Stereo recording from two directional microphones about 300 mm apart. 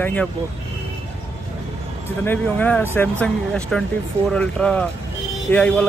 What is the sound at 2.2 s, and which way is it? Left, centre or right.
A man's voice, centre.